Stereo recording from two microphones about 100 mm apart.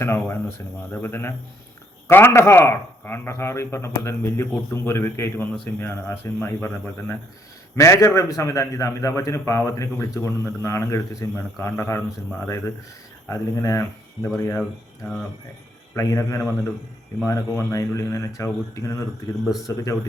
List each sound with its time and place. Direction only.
0.0 s a man's voice: 25° left (ahead or behind)
14.6 s speech: 5° left (ahead or behind)
16.0 s a man's voice: 30° left (ahead or behind)